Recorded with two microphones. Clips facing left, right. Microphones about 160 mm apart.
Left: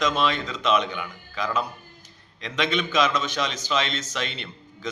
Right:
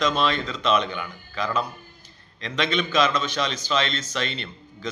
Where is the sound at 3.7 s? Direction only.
10° left (ahead or behind).